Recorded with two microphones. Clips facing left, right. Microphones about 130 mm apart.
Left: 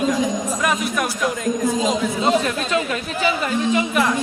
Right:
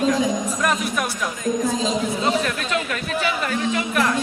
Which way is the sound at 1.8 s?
15° left (ahead or behind).